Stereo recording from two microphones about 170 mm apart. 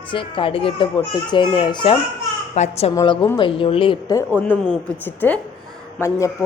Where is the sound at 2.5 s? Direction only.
40° left (ahead or behind).